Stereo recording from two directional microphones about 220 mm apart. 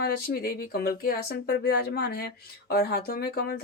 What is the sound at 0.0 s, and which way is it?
Speech, 45° left (ahead or behind).